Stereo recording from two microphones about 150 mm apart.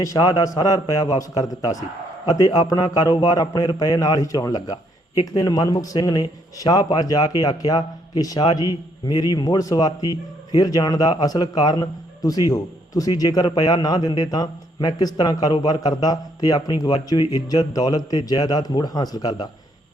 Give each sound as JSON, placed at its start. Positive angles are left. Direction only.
{"t": 0.0, "sound": "a man's voice", "side_deg": 20}